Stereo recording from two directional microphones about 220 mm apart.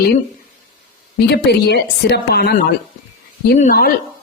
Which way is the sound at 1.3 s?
50° left (ahead or behind).